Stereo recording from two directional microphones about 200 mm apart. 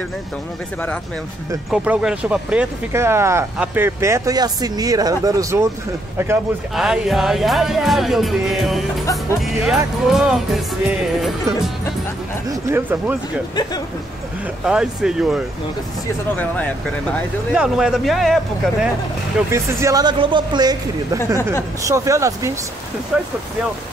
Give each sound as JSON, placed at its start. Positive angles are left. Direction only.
{"t": 1.7, "sound": "speech", "side_deg": -5}
{"t": 6.7, "sound": "speech", "side_deg": 0}
{"t": 12.4, "sound": "speech", "side_deg": -15}
{"t": 14.6, "sound": "speech", "side_deg": -5}
{"t": 17.1, "sound": "speech", "side_deg": 0}
{"t": 19.5, "sound": "speech", "side_deg": -15}
{"t": 23.1, "sound": "speech", "side_deg": 0}